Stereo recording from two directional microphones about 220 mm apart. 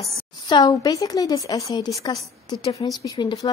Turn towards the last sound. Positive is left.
turn(degrees=15)  # may be behind; listen again after turning